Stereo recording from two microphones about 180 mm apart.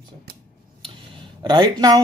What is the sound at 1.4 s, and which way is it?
Speech, 25° right (ahead or behind).